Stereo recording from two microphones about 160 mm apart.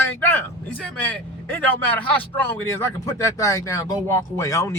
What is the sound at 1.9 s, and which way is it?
Speech, 10° left (ahead or behind).